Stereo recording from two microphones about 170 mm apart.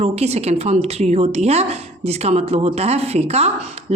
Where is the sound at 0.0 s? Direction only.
40° right (ahead or behind).